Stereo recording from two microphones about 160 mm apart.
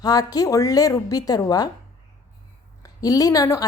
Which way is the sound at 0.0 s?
25° left (ahead or behind).